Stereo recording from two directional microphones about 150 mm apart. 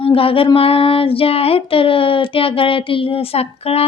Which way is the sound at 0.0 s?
40° left (ahead or behind).